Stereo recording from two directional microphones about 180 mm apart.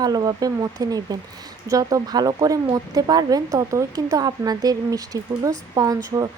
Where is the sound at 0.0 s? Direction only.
20° right (ahead or behind).